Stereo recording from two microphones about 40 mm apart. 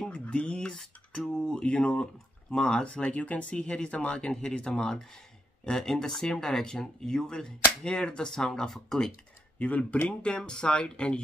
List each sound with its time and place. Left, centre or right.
0.1 s a sound: left
2.5 s speech: left
5.7 s speech: centre
9.6 s speech: left
10.0 s speech: left